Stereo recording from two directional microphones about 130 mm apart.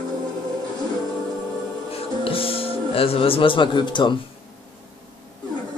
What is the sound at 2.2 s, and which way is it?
Music, 45° left (ahead or behind).